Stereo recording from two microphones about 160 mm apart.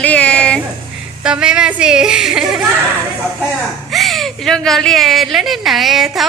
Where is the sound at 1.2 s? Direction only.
5° right (ahead or behind).